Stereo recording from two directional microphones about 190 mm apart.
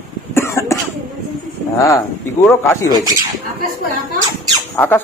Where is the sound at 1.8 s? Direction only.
15° left (ahead or behind).